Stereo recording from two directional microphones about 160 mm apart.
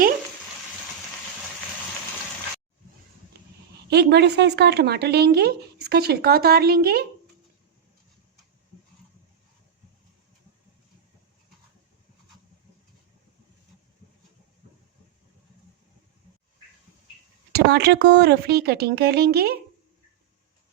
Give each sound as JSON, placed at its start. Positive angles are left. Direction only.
{"t": 3.8, "sound": "speech", "side_deg": -90}
{"t": 17.5, "sound": "speech", "side_deg": -90}